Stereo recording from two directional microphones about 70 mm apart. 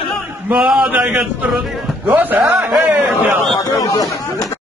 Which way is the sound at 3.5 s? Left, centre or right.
Left.